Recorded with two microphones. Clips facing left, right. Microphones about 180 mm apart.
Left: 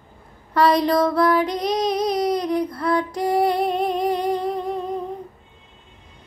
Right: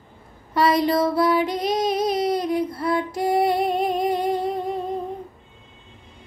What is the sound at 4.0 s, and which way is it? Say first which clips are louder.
Music: even; 25° right (ahead or behind).